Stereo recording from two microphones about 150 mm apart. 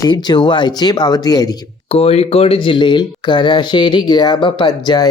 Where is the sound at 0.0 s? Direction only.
30° left (ahead or behind).